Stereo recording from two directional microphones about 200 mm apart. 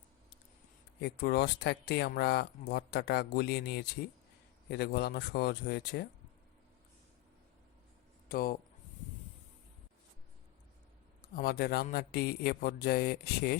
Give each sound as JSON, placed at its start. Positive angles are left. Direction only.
{"t": 1.0, "sound": "speech", "side_deg": 55}
{"t": 8.3, "sound": "speech", "side_deg": 50}
{"t": 11.2, "sound": "speech", "side_deg": 45}